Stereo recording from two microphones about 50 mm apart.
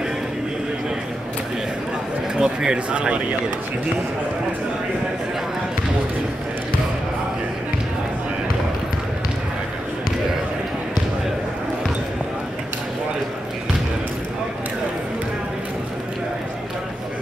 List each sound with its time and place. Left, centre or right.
2.3 s speech: centre